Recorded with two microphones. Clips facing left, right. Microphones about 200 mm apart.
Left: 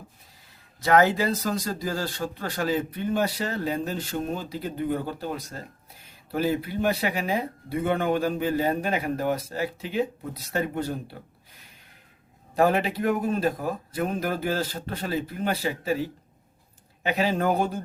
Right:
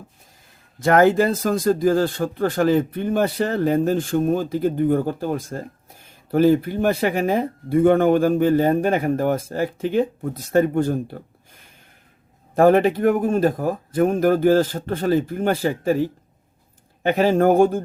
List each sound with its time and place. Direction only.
0.8 s speech: 50° right (ahead or behind)